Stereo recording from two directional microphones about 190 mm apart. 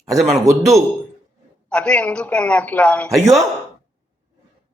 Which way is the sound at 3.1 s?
15° right (ahead or behind).